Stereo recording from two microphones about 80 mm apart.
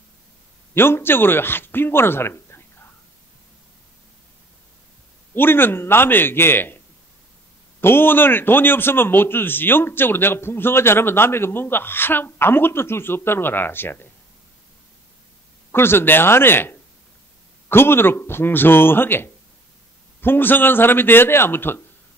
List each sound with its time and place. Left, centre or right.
0.7 s a man's voice: left
5.3 s a man's voice: left
7.8 s a man's voice: left
15.7 s a man's voice: left